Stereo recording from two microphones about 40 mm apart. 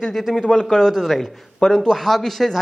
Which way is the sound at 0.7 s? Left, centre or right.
Centre.